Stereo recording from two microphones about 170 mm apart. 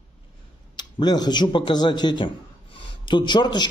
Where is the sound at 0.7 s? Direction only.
25° left (ahead or behind).